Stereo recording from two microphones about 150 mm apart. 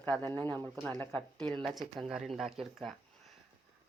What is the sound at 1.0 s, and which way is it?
Speech, 5° left (ahead or behind).